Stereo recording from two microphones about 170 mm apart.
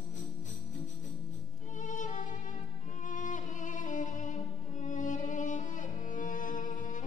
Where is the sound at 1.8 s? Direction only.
45° left (ahead or behind).